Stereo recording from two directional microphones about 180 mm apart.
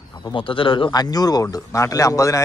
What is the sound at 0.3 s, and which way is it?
Speech, 30° left (ahead or behind).